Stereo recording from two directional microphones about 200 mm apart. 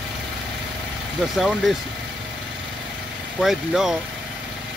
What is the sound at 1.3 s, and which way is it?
Speech, centre (ahead or behind).